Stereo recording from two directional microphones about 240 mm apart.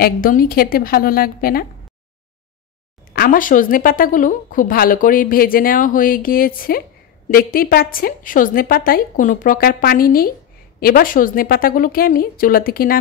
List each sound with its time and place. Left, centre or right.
0.0 s a woman's voice: left
3.1 s a woman's voice: left